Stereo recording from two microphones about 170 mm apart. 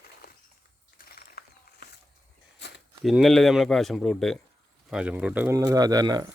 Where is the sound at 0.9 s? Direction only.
60° left (ahead or behind).